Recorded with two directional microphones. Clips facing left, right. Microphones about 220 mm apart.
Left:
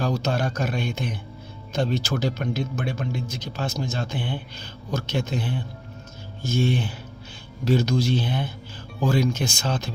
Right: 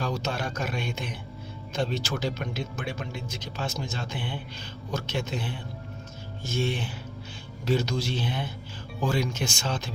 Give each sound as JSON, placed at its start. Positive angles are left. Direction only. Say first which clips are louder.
{"t": 0.0, "sound": "speech", "louder": "left 5 dB", "side_deg": 40}